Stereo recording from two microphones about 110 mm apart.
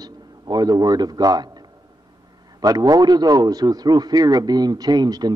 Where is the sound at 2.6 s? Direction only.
35° right (ahead or behind).